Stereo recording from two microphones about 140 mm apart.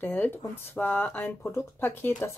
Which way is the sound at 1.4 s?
20° left (ahead or behind).